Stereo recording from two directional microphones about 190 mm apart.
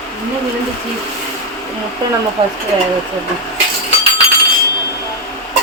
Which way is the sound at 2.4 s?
30° right (ahead or behind).